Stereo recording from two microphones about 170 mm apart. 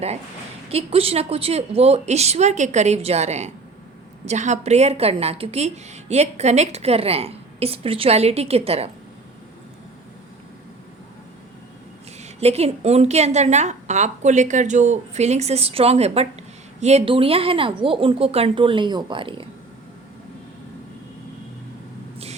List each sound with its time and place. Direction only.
0.7 s a woman's voice: 35° right (ahead or behind)
12.4 s a woman's voice: 40° right (ahead or behind)